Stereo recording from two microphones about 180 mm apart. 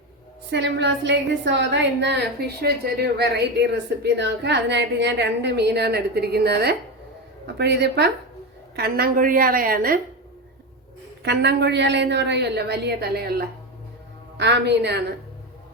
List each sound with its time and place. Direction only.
0.5 s a woman's voice: 75° right (ahead or behind); by 10.0 s 55° right (ahead or behind)
11.2 s a woman's voice: 70° right (ahead or behind)
14.3 s a woman's voice: 70° right (ahead or behind)